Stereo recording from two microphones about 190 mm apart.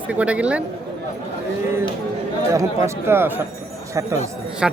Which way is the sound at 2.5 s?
15° right (ahead or behind).